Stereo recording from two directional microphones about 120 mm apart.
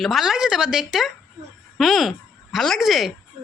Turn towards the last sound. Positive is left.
turn(degrees=0)  # may be behind; listen again after turning